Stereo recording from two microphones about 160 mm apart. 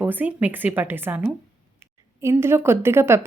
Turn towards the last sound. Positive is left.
turn(degrees=-15)  # may be behind; listen again after turning